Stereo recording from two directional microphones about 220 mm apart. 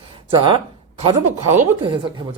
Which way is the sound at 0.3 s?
20° right (ahead or behind).